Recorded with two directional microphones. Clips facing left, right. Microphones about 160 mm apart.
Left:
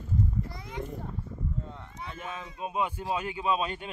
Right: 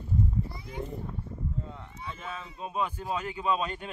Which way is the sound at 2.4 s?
10° left (ahead or behind).